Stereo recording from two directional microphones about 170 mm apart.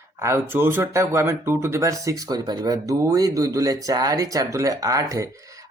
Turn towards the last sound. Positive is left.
turn(degrees=-20)  # may be behind; listen again after turning